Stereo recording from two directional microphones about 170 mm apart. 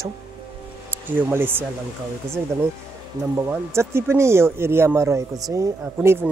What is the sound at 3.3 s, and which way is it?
Speech, 15° right (ahead or behind).